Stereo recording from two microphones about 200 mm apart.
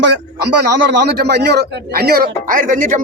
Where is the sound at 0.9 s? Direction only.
60° right (ahead or behind).